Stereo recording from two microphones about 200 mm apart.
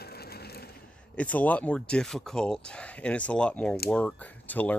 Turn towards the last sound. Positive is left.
turn(degrees=10)  # may be behind; listen again after turning